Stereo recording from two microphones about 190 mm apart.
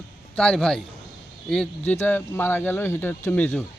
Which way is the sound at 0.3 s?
5° left (ahead or behind).